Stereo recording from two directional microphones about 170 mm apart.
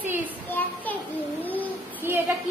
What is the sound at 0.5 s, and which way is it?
A child's voice, 10° left (ahead or behind).